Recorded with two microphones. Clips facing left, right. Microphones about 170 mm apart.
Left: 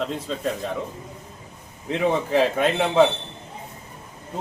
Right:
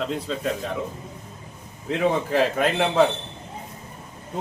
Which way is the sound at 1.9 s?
Centre (ahead or behind).